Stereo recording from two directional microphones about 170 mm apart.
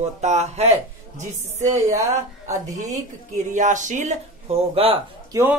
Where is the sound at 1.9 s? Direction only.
20° right (ahead or behind).